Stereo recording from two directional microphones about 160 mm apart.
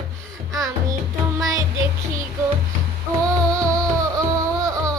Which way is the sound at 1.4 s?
20° right (ahead or behind).